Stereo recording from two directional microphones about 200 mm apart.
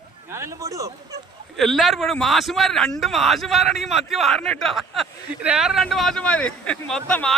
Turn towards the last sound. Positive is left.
turn(degrees=5)  # may be behind; listen again after turning